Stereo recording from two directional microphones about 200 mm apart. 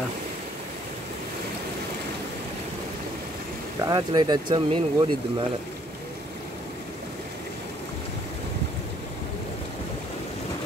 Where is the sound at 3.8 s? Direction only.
20° right (ahead or behind).